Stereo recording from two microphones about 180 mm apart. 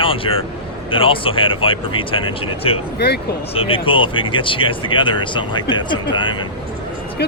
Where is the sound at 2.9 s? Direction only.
65° left (ahead or behind).